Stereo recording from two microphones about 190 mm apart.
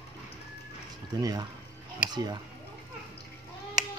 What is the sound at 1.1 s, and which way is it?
Speech, 20° right (ahead or behind).